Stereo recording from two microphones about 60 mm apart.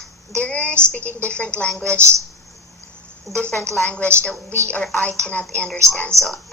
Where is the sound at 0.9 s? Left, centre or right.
Left.